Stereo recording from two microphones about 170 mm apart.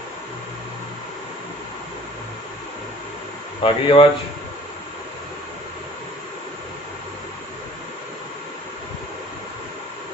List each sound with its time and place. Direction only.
3.6 s speech: 30° left (ahead or behind)